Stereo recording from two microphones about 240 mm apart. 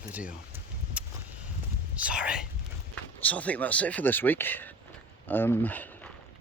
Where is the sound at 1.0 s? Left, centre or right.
Centre.